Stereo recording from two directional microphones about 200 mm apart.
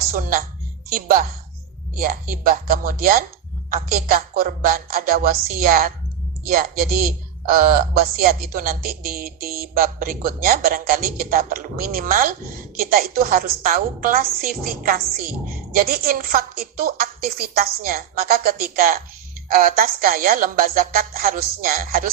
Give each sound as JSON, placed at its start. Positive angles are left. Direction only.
{"t": 0.0, "sound": "a woman's voice", "side_deg": -45}